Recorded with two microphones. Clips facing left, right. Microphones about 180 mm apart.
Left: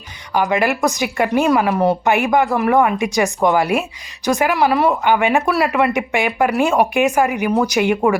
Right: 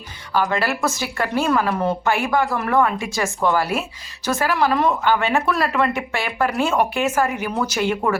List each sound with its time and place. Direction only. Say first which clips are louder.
0.3 s speech: left 4 dB; 15° left (ahead or behind)